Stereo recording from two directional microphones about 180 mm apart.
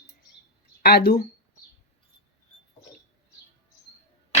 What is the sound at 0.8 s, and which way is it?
Speech, 60° left (ahead or behind).